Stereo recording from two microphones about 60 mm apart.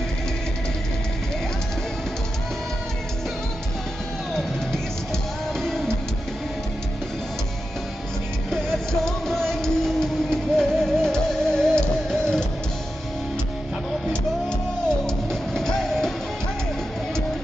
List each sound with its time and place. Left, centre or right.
4.3 s music: centre
8.5 s music: centre
15.0 s music: centre